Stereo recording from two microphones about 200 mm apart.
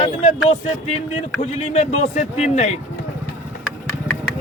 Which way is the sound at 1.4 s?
35° left (ahead or behind).